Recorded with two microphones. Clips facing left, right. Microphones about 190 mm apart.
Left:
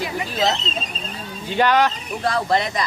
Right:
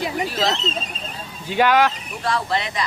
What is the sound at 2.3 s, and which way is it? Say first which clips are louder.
Speech: left 3 dB; 40° left (ahead or behind).